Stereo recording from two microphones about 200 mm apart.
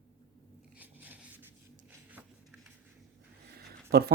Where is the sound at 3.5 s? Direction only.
50° right (ahead or behind).